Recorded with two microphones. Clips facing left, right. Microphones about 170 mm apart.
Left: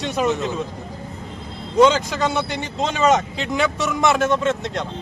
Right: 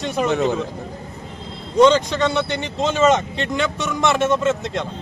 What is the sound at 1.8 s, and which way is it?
Speech, 5° left (ahead or behind).